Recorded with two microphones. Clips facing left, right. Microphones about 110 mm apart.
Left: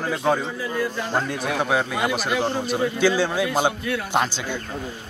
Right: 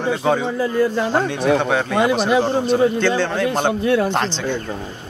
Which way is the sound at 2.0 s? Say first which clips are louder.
Right 7 dB; 35° right (ahead or behind).